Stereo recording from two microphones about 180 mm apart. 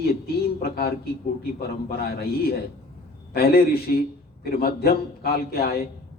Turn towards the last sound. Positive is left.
turn(degrees=60)  # may be behind; listen again after turning